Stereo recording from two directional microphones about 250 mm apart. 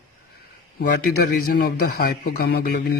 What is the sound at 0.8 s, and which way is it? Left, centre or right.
Speech, left.